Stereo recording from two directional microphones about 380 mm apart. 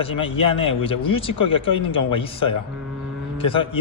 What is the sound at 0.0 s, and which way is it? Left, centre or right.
Speech, centre.